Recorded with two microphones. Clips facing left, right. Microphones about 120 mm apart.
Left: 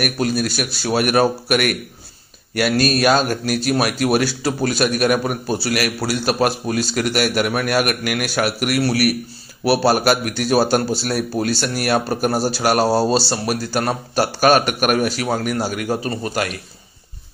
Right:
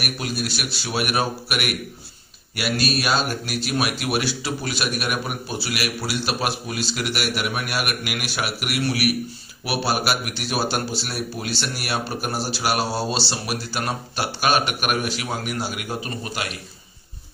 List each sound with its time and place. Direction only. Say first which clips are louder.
0.0 s a man's voice: left 8 dB; 45° left (ahead or behind)